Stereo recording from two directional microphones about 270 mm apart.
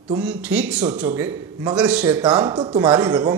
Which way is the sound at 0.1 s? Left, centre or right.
Centre.